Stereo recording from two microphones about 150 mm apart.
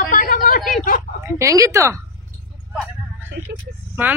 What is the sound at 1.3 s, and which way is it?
Speech, 20° right (ahead or behind).